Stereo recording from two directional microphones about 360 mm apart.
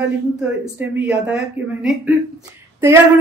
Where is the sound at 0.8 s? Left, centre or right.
Centre.